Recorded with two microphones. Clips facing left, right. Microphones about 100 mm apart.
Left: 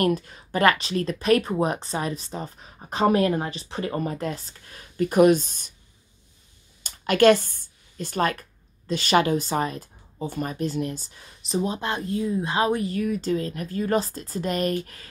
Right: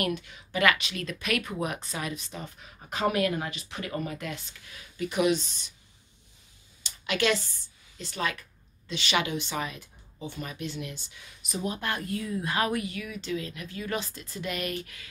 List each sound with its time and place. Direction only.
0.0 s speech: 40° left (ahead or behind)
6.8 s speech: 50° left (ahead or behind)